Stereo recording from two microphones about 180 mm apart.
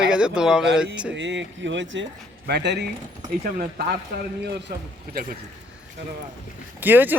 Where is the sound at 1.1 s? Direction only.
85° right.